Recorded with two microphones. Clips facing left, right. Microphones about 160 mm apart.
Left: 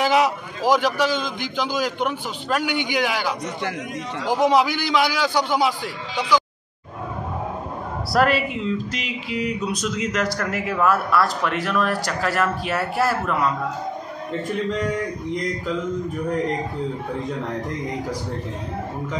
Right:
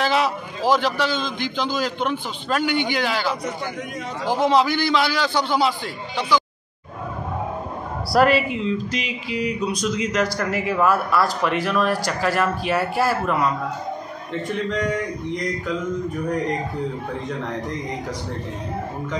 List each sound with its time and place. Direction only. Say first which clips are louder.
0.0 s a sound: left 2 dB; 15° left (ahead or behind)
0.7 s a man's voice: left 1 dB; 15° left (ahead or behind)
8.1 s speech: right 2 dB; centre (ahead or behind)